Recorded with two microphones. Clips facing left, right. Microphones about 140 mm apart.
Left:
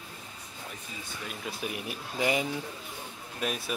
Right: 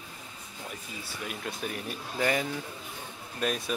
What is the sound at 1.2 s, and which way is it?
Speech, 5° left (ahead or behind).